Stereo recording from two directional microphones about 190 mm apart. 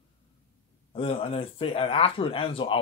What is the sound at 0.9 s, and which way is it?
Speech, 30° left (ahead or behind).